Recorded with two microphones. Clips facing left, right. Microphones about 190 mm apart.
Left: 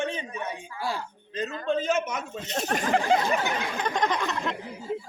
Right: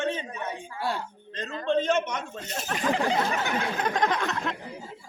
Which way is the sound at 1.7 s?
5° left (ahead or behind).